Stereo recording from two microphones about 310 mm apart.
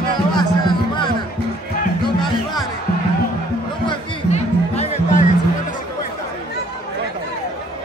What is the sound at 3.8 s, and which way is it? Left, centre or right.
Music, centre.